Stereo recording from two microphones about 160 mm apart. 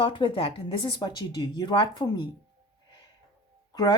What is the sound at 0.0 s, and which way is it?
Speech, 30° left (ahead or behind).